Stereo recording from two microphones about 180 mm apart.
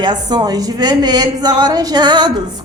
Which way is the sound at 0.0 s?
25° right (ahead or behind).